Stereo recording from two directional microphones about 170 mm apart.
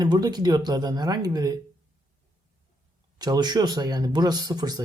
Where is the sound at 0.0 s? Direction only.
25° right (ahead or behind).